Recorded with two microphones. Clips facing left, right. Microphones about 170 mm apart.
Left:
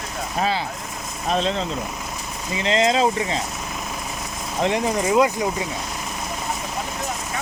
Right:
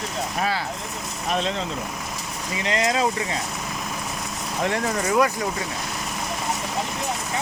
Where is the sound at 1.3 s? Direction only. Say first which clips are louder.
Left 3 dB; 35° left (ahead or behind).